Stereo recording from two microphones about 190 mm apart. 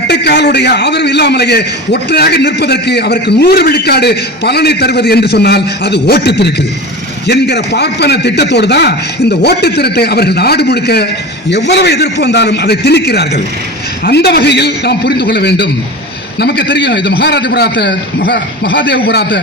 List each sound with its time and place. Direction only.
0.1 s a man's voice: 60° left (ahead or behind)